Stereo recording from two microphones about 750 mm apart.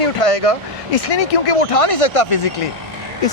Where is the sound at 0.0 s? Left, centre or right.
Left.